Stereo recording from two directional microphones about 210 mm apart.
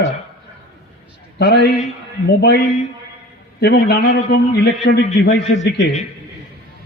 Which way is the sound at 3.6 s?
50° left (ahead or behind).